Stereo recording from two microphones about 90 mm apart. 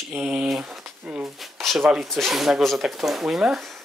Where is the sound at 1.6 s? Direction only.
5° left (ahead or behind).